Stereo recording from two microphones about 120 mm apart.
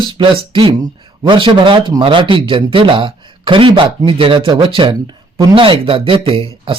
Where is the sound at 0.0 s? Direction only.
40° right (ahead or behind).